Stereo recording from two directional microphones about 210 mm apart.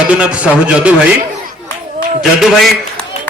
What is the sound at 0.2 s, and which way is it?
Speech, 5° right (ahead or behind).